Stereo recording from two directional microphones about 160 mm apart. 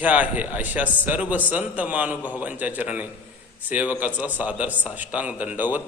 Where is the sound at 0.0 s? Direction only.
10° right (ahead or behind).